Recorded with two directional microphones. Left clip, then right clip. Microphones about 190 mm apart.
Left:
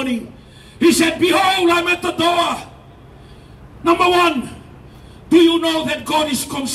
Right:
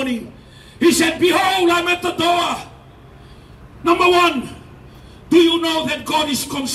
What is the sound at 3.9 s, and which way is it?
A man's voice, 35° left (ahead or behind).